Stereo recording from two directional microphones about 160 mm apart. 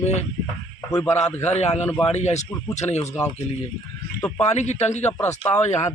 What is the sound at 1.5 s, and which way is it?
Speech, 45° left (ahead or behind).